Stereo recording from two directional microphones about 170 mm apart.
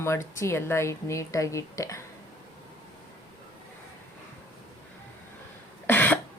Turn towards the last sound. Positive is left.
turn(degrees=10)  # may be behind; listen again after turning